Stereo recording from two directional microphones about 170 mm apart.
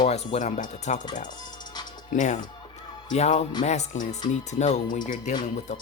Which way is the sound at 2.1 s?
45° left (ahead or behind).